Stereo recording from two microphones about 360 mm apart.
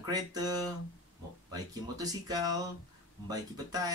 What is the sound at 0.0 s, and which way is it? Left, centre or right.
Speech, centre.